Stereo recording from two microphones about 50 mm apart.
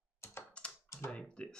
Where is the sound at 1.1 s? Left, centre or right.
Centre.